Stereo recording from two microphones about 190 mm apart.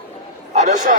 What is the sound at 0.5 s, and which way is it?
Speech, 40° right (ahead or behind).